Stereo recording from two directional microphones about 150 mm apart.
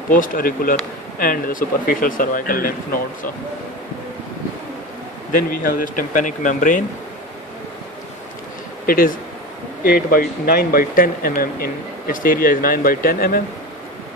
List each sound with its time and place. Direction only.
0.1 s speech: 65° left (ahead or behind)
5.3 s speech: 70° left (ahead or behind)
8.8 s speech: 70° left (ahead or behind)